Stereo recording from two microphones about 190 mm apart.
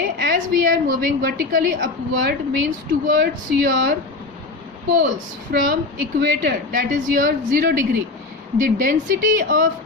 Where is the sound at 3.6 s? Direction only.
60° right (ahead or behind).